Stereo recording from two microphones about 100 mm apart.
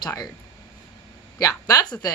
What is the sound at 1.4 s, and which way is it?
Speech, 35° left (ahead or behind).